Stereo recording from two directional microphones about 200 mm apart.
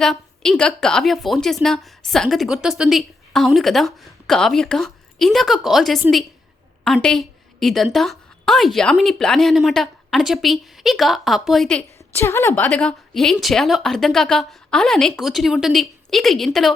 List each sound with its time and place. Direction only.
0.0 s a woman's voice: 5° left (ahead or behind)
12.2 s a woman's voice: 15° left (ahead or behind)